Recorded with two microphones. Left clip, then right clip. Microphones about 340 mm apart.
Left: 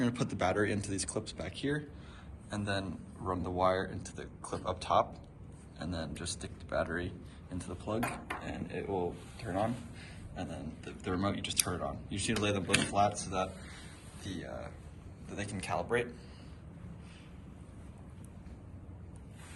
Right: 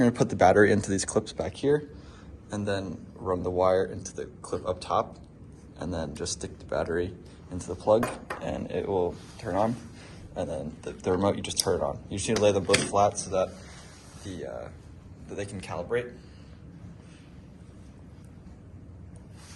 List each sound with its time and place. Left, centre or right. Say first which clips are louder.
0.0 s speech: right 12 dB; right
2.5 s speech: right 6 dB; centre
8.4 s speech: right 9 dB; right